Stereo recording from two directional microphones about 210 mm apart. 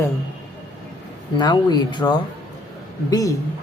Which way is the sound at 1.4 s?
20° left (ahead or behind).